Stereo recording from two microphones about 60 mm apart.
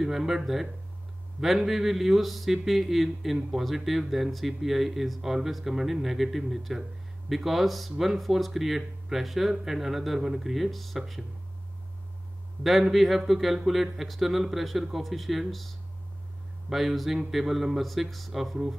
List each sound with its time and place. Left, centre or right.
0.0 s speech: centre
12.9 s speech: centre